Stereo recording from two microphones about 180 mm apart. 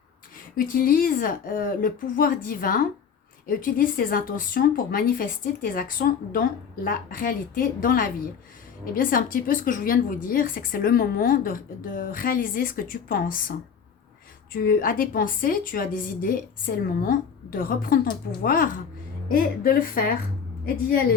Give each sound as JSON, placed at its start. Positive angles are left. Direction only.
{"t": 0.5, "sound": "speech", "side_deg": 55}
{"t": 14.5, "sound": "speech", "side_deg": 55}